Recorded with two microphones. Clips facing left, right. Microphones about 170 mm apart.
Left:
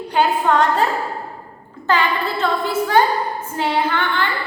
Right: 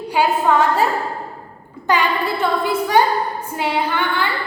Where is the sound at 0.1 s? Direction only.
5° right (ahead or behind).